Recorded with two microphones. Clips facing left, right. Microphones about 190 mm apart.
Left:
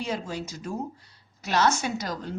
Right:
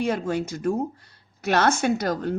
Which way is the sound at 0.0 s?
55° right (ahead or behind).